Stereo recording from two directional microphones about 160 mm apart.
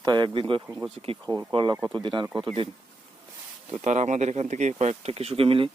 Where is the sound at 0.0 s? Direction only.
25° right (ahead or behind).